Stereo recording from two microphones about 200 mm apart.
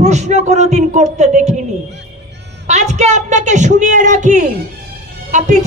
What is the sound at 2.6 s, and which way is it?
Speech, 35° right (ahead or behind).